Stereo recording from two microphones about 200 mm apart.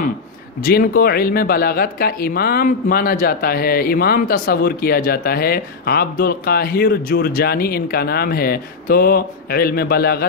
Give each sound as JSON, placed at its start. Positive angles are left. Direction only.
{"t": 0.7, "sound": "speech", "side_deg": 50}